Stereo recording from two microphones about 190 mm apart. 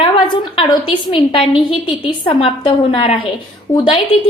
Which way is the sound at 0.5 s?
25° left (ahead or behind).